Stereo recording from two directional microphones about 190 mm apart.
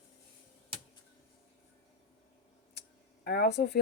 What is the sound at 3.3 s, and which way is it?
Speech, 60° left (ahead or behind).